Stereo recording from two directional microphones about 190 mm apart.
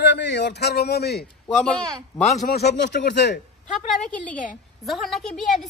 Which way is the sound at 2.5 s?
65° left (ahead or behind).